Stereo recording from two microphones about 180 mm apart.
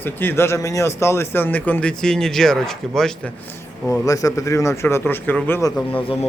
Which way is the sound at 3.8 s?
15° left (ahead or behind).